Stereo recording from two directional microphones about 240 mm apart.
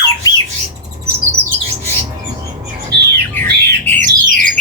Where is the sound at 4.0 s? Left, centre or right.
Right.